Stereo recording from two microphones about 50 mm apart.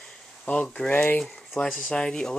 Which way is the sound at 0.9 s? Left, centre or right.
Left.